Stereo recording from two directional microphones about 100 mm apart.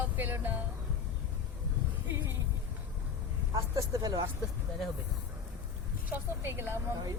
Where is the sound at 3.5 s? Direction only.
35° right (ahead or behind).